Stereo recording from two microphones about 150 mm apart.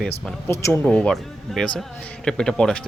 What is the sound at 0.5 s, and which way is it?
Speech, 20° left (ahead or behind).